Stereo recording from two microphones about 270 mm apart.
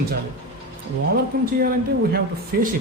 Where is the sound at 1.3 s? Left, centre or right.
Right.